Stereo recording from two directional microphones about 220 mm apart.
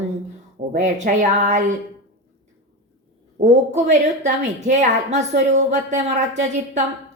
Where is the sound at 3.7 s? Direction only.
30° right (ahead or behind).